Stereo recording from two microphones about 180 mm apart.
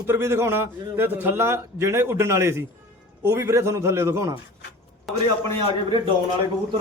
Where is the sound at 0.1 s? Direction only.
15° right (ahead or behind).